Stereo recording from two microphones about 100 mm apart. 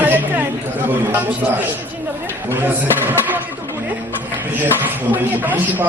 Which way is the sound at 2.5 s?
20° right (ahead or behind).